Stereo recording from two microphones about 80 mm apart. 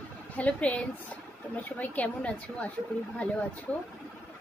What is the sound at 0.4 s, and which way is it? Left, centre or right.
A woman's voice, centre.